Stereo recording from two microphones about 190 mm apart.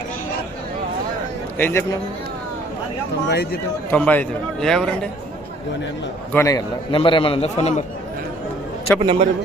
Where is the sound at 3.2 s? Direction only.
55° left (ahead or behind).